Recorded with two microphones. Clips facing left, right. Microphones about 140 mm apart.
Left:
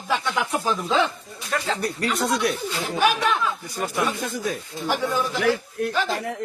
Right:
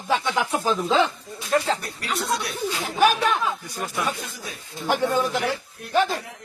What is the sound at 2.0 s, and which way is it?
Speech, 45° left (ahead or behind).